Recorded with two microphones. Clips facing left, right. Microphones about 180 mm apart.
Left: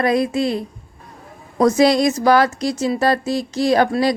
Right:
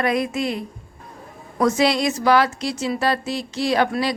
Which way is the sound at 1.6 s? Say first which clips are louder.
Left 5 dB; 40° left (ahead or behind).